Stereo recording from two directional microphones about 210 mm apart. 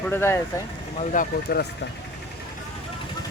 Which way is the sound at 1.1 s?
40° left (ahead or behind).